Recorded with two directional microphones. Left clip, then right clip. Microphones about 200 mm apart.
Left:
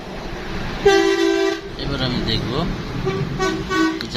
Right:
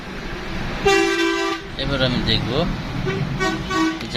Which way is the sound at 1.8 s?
15° right (ahead or behind).